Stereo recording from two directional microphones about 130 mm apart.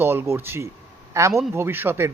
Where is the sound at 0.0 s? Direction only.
15° right (ahead or behind).